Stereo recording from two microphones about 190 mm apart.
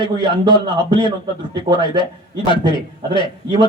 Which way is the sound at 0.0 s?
25° left (ahead or behind).